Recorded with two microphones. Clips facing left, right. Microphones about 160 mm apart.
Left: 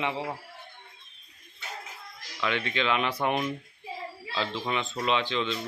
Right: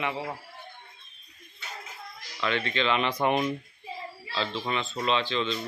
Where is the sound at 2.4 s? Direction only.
10° left (ahead or behind).